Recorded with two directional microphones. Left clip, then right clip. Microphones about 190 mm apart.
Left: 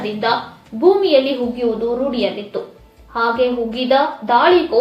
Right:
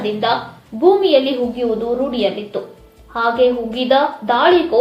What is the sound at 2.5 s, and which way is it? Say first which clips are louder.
A woman's voice: right 1 dB; 25° right (ahead or behind).